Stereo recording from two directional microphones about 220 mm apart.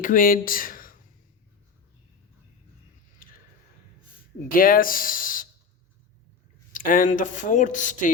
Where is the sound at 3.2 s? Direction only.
40° left (ahead or behind).